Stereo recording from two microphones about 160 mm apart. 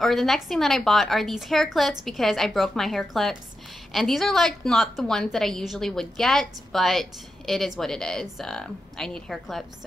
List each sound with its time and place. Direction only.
0.0 s a woman's voice: centre (ahead or behind)